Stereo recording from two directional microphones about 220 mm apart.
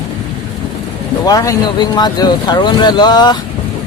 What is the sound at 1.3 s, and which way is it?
Speech, 15° left (ahead or behind).